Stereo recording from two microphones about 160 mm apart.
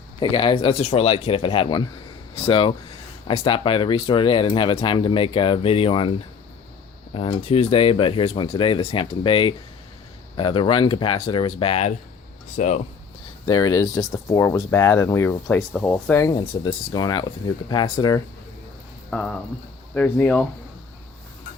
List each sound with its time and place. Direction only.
0.2 s speech: 30° left (ahead or behind); by 12.8 s 50° left (ahead or behind)
13.4 s speech: 25° left (ahead or behind)
16.3 s speech: 30° left (ahead or behind)
19.1 s speech: 5° left (ahead or behind)